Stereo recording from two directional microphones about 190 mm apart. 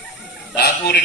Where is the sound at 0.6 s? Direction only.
60° left (ahead or behind).